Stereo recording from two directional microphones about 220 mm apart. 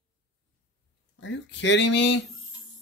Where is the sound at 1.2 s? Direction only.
55° left (ahead or behind).